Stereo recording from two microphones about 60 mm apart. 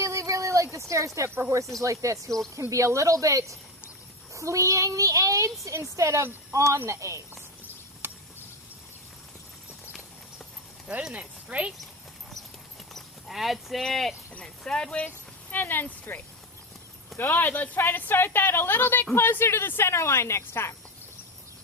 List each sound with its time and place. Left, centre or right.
0.0 s a sound: right
1.8 s a child's voice: right
11.1 s speech: centre
12.9 s clip-clop: centre
13.8 s speech: centre
14.8 s a woman's voice: left